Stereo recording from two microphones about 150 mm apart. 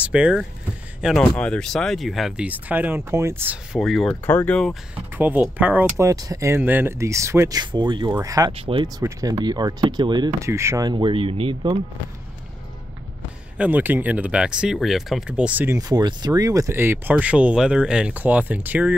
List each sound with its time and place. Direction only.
0.0 s speech: 5° right (ahead or behind)
1.4 s speech: 5° left (ahead or behind); by 3.5 s 15° right (ahead or behind)
3.7 s speech: centre (ahead or behind)
5.1 s speech: 10° right (ahead or behind)
6.0 s speech: 25° right (ahead or behind)
8.5 s speech: 40° right (ahead or behind)
8.8 s speech: 25° right (ahead or behind)
13.6 s speech: 10° right (ahead or behind)
15.8 s speech: 25° right (ahead or behind); by 18.9 s 10° right (ahead or behind)